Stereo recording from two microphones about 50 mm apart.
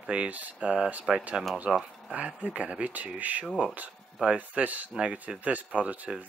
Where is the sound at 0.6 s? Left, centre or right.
Centre.